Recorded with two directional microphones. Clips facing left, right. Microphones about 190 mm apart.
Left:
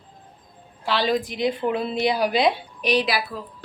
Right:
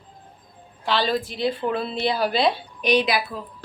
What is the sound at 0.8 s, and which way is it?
A woman's voice, 10° left (ahead or behind).